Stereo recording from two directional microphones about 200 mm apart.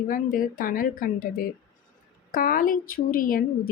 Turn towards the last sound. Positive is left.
turn(degrees=45)  # may be behind; listen again after turning